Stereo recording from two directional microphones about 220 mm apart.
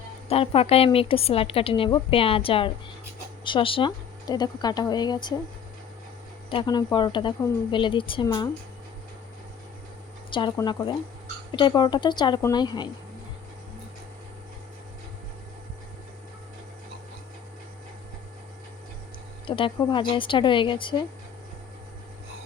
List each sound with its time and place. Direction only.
0.3 s a woman's voice: 25° left (ahead or behind)
6.5 s a woman's voice: 20° left (ahead or behind)
10.3 s a woman's voice: 20° left (ahead or behind)
19.5 s a woman's voice: 25° left (ahead or behind)